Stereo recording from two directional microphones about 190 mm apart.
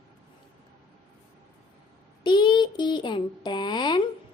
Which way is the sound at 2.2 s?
25° left (ahead or behind).